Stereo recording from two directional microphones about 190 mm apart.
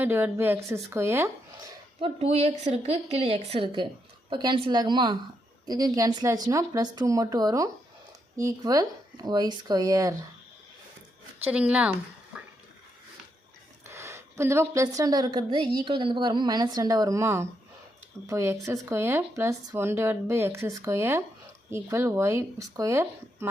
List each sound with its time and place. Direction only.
0.0 s speech: 10° right (ahead or behind)
2.0 s a woman's voice: 30° right (ahead or behind)
11.4 s speech: 5° right (ahead or behind)
13.9 s a woman's voice: 15° right (ahead or behind)